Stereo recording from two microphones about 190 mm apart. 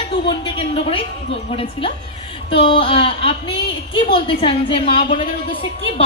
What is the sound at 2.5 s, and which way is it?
Speech, 25° left (ahead or behind).